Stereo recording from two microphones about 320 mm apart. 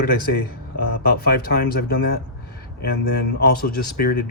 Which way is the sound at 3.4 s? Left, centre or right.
Left.